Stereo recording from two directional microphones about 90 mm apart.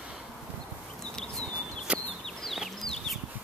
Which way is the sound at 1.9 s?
15° right (ahead or behind).